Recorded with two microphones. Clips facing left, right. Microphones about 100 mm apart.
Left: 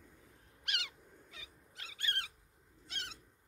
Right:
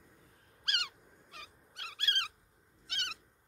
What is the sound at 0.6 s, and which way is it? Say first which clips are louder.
Owl: right 4 dB; 60° right (ahead or behind).